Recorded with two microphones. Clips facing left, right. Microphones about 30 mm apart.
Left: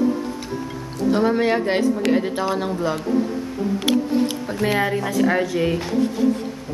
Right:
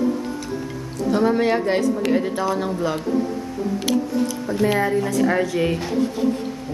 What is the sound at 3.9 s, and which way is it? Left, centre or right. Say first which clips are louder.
Music: left 2 dB; left.